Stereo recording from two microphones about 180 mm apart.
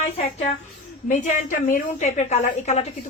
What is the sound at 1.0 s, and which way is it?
A woman's voice, 45° left (ahead or behind).